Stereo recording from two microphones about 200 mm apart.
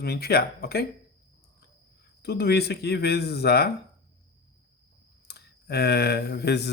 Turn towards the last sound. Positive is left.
turn(degrees=55)  # may be behind; listen again after turning